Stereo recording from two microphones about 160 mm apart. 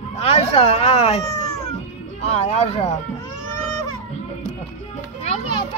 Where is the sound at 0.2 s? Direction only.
40° left (ahead or behind).